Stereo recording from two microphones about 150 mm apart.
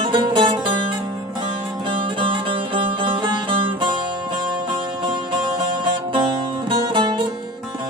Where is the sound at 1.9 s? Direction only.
35° right (ahead or behind).